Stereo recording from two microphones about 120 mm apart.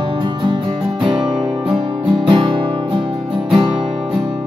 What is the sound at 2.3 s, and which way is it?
Music, 45° right (ahead or behind).